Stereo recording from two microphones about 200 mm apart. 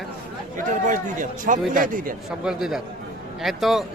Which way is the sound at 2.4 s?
5° right (ahead or behind).